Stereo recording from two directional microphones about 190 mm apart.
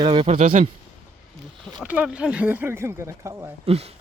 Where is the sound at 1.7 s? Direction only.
5° right (ahead or behind).